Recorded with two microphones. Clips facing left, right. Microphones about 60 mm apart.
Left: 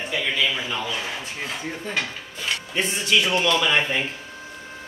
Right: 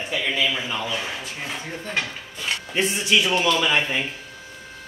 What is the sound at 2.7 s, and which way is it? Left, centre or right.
Speech, centre.